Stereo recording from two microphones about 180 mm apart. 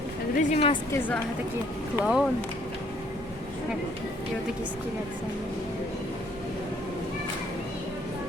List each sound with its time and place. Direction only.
0.3 s speech: 40° left (ahead or behind)
0.9 s a woman's voice: 10° left (ahead or behind)
2.0 s speech: 5° right (ahead or behind)